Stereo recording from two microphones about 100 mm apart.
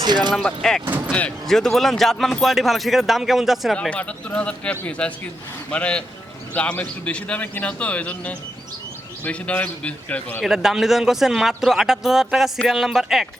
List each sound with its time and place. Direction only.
0.3 s speech: 5° left (ahead or behind)
3.8 s a man's voice: 10° left (ahead or behind)
10.4 s speech: 5° right (ahead or behind)